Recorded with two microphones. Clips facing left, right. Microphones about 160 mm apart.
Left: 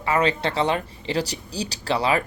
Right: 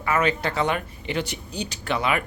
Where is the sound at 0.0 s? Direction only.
30° left (ahead or behind).